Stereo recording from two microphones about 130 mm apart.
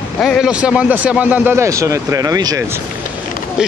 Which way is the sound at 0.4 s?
10° right (ahead or behind).